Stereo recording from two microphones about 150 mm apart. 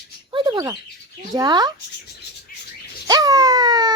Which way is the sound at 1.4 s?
30° right (ahead or behind).